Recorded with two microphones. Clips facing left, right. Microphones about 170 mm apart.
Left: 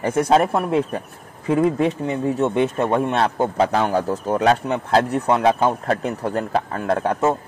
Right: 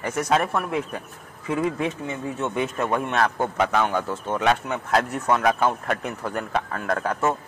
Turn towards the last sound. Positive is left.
turn(degrees=25)  # may be behind; listen again after turning